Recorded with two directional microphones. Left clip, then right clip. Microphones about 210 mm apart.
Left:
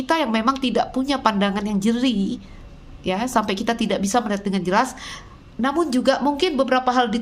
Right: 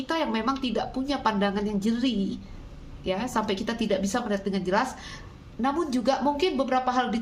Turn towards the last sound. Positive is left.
turn(degrees=45)  # may be behind; listen again after turning